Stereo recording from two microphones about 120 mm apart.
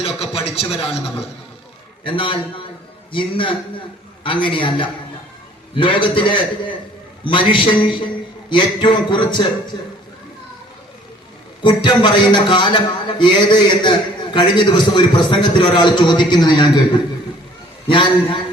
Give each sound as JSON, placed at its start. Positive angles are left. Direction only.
{"t": 0.0, "sound": "a sound", "side_deg": 55}
{"t": 2.0, "sound": "a man's voice", "side_deg": 45}
{"t": 11.6, "sound": "a man's voice", "side_deg": 40}